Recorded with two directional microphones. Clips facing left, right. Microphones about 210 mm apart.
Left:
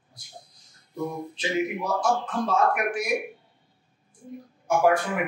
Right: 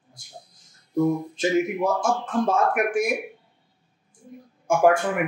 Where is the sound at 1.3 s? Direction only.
50° right (ahead or behind).